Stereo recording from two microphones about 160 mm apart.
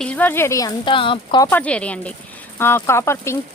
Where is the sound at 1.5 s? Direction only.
10° left (ahead or behind).